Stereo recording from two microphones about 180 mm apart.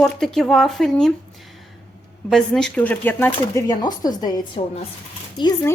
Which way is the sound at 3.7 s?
20° left (ahead or behind).